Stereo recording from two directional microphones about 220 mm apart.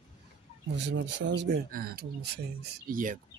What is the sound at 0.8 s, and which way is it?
Speech, 55° right (ahead or behind).